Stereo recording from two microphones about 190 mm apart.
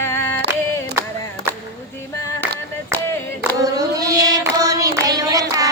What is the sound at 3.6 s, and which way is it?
Hands, 20° right (ahead or behind).